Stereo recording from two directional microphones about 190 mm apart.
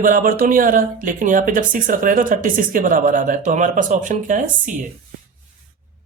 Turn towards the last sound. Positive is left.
turn(degrees=-40)  # may be behind; listen again after turning